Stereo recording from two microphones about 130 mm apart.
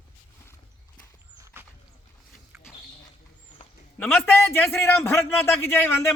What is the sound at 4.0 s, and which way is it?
A man's voice, 5° left (ahead or behind).